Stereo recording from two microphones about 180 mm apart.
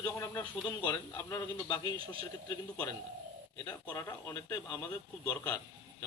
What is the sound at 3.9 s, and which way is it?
A man's voice, 15° left (ahead or behind).